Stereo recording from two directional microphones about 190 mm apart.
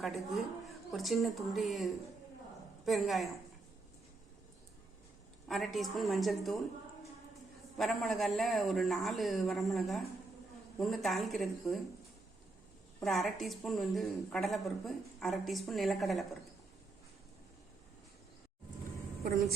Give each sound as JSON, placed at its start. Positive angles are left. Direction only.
{"t": 0.0, "sound": "speech", "side_deg": 0}
{"t": 5.5, "sound": "speech", "side_deg": 0}
{"t": 7.8, "sound": "speech", "side_deg": 0}
{"t": 13.0, "sound": "speech", "side_deg": 0}
{"t": 19.2, "sound": "a woman's voice", "side_deg": -50}